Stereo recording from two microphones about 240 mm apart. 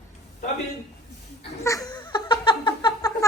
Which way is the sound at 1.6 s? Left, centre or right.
Centre.